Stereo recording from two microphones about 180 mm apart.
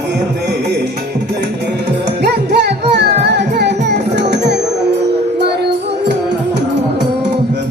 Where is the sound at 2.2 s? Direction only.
70° right (ahead or behind).